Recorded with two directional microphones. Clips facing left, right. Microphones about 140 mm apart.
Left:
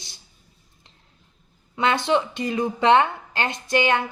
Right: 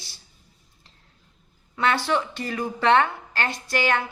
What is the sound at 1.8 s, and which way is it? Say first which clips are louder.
A woman's voice: left 2 dB; 20° left (ahead or behind).